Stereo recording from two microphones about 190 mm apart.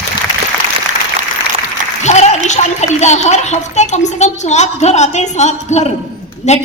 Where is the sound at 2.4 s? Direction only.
35° left (ahead or behind).